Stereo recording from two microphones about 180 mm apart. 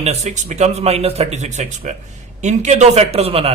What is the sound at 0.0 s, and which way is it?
A man's voice, 40° right (ahead or behind).